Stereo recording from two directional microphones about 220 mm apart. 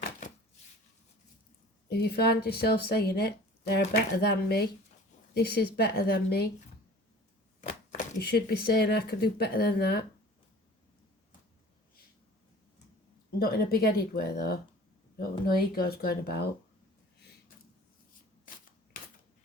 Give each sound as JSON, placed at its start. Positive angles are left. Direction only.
{"t": 1.9, "sound": "speech", "side_deg": 45}
{"t": 8.2, "sound": "speech", "side_deg": 45}
{"t": 13.4, "sound": "speech", "side_deg": 45}